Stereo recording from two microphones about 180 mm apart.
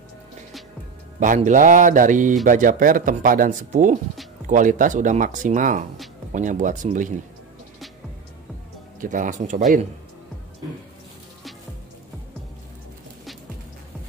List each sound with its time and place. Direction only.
1.2 s speech: 45° right (ahead or behind)
9.0 s speech: 45° right (ahead or behind)